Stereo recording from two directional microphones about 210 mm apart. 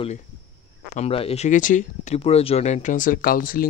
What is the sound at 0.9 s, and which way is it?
Speech, 30° left (ahead or behind).